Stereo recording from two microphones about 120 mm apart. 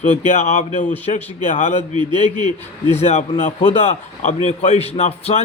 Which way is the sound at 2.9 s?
65° left (ahead or behind).